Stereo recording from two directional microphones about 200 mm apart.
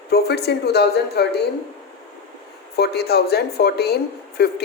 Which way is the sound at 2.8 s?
55° left (ahead or behind).